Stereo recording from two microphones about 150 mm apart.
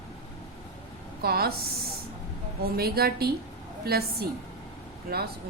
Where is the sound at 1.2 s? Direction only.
90° right.